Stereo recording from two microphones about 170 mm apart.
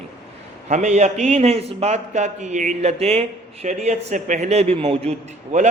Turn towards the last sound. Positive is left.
turn(degrees=-40)  # may be behind; listen again after turning